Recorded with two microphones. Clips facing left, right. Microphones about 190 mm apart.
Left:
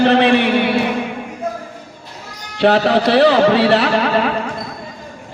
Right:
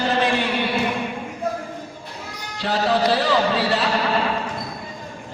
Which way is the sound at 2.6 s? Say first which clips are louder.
Left 7 dB; 65° left (ahead or behind).